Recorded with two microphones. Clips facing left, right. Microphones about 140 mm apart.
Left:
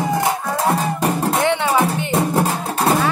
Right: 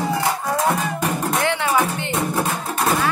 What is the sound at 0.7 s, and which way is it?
Music, 35° left (ahead or behind).